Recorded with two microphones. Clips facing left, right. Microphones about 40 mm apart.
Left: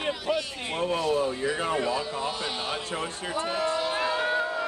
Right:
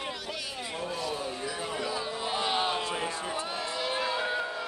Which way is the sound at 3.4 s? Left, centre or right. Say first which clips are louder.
Left 7 dB; left.